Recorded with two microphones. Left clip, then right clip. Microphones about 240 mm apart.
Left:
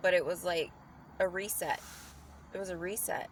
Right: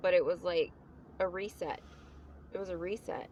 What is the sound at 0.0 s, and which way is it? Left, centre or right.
Speech, centre.